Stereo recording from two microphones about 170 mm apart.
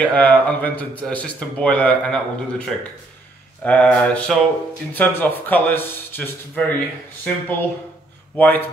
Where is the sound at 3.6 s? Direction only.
5° left (ahead or behind).